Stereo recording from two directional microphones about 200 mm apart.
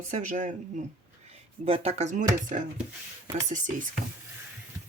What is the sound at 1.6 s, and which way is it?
Speech, 30° right (ahead or behind).